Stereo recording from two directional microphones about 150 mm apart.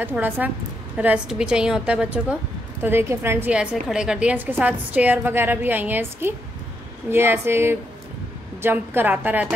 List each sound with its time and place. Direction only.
0.0 s a woman's voice: 10° right (ahead or behind)